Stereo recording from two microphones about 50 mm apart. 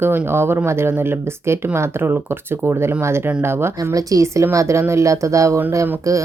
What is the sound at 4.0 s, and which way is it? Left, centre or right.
Speech, right.